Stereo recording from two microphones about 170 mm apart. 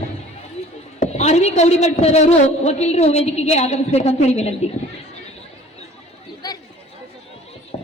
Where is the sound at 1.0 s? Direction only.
40° left (ahead or behind).